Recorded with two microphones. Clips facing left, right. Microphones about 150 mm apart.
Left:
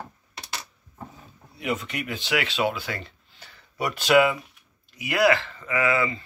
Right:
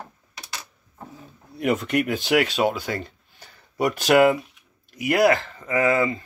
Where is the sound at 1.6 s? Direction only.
50° right (ahead or behind).